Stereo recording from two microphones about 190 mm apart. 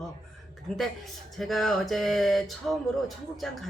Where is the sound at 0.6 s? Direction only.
Centre (ahead or behind).